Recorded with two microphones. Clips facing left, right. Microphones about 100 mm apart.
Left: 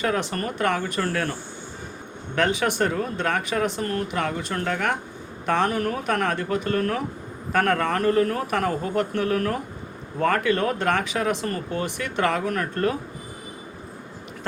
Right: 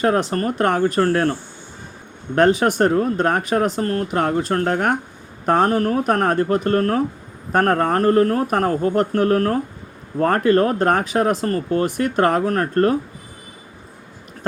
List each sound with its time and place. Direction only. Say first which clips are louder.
0.0 s speech: right 7 dB; 40° right (ahead or behind)